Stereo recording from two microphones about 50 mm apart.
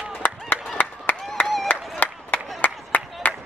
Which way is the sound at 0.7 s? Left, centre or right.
Left.